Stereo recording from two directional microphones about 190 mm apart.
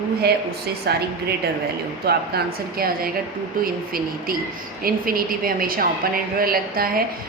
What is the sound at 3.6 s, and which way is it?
A woman's voice, 50° right (ahead or behind).